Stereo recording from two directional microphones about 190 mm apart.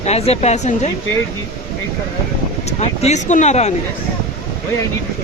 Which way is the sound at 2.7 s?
35° left (ahead or behind).